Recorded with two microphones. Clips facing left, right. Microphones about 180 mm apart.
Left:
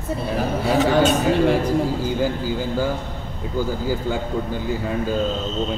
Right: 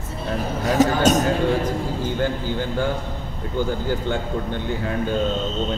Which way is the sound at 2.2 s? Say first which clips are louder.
Left 1 dB; 5° left (ahead or behind).